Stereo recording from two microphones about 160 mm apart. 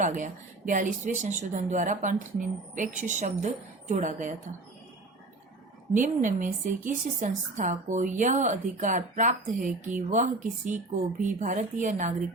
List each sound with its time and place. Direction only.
0.0 s a woman's voice: 50° right (ahead or behind)
5.9 s a woman's voice: 50° right (ahead or behind)